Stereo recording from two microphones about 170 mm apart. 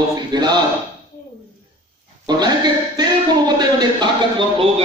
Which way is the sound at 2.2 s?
25° right (ahead or behind).